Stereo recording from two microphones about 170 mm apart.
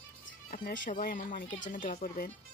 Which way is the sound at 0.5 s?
50° left (ahead or behind).